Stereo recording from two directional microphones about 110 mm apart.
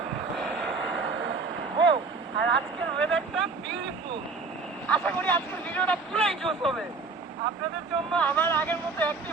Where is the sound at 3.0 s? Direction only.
10° left (ahead or behind).